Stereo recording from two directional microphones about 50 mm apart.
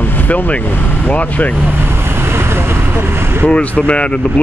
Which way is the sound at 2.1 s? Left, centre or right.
Right.